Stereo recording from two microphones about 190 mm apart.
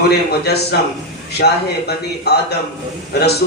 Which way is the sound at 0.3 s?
60° left (ahead or behind).